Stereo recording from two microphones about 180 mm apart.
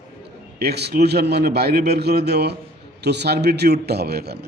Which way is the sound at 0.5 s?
65° right (ahead or behind).